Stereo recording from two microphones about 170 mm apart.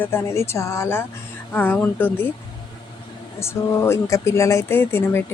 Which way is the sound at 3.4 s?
15° left (ahead or behind).